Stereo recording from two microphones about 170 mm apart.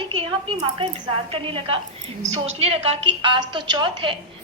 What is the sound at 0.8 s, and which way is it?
A woman's voice, 30° right (ahead or behind).